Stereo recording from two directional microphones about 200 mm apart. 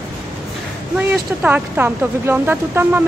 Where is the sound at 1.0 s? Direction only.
10° right (ahead or behind).